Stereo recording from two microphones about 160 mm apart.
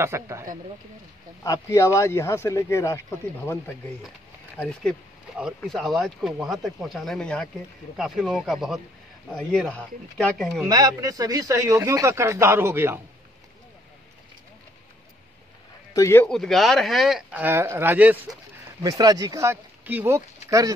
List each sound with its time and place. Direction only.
0.0 s speech: 15° right (ahead or behind)
1.4 s speech: 20° left (ahead or behind)
4.6 s speech: 5° left (ahead or behind)
10.7 s speech: 20° right (ahead or behind)
15.9 s a man's voice: 20° left (ahead or behind)
16.3 s speech: centre (ahead or behind)
18.8 s speech: 25° right (ahead or behind)